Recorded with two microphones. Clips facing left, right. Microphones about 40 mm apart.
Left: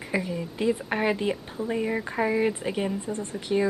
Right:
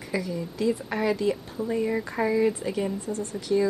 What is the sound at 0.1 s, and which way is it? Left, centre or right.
Speech, left.